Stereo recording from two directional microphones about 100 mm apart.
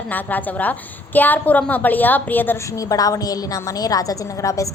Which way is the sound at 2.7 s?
35° left (ahead or behind).